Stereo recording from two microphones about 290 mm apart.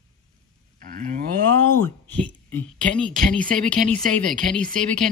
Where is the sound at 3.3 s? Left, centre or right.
Centre.